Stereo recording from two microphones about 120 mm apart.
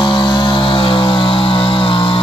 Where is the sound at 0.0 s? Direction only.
40° left (ahead or behind).